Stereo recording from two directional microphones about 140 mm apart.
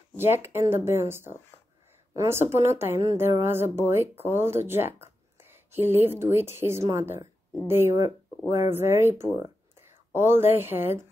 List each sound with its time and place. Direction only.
0.2 s speech: 15° right (ahead or behind)